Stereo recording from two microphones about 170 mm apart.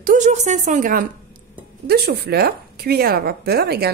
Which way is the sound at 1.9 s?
65° right (ahead or behind).